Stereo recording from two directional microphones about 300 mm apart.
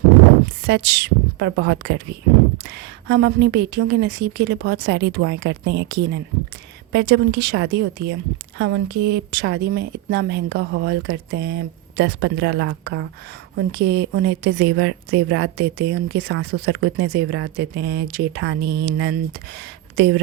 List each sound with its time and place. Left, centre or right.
0.6 s a woman's voice: right